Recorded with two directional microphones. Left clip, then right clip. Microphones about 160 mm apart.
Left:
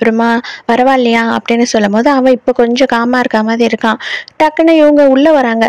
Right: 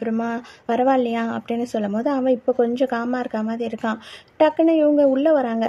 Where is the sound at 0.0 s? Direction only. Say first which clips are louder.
Left 15 dB; 25° left (ahead or behind).